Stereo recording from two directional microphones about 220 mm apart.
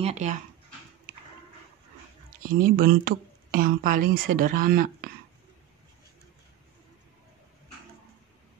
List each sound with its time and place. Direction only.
0.0 s speech: 30° right (ahead or behind)
2.4 s speech: 40° right (ahead or behind)